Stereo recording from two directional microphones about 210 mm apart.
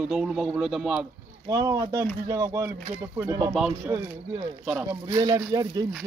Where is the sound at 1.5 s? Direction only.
15° right (ahead or behind).